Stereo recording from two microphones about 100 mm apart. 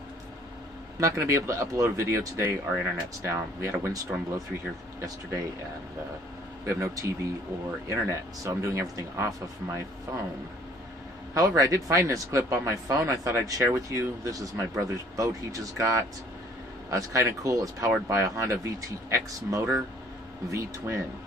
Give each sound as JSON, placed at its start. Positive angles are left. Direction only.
{"t": 0.9, "sound": "speech", "side_deg": -30}
{"t": 5.0, "sound": "speech", "side_deg": -35}
{"t": 6.6, "sound": "speech", "side_deg": -30}
{"t": 11.3, "sound": "speech", "side_deg": -35}